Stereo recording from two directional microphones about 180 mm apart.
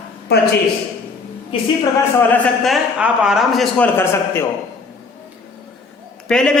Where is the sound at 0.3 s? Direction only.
65° left (ahead or behind).